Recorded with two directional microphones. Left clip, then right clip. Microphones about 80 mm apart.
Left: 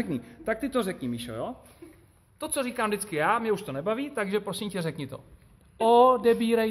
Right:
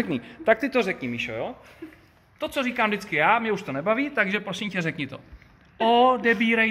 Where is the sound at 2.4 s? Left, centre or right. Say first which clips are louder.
Right 4 dB; centre.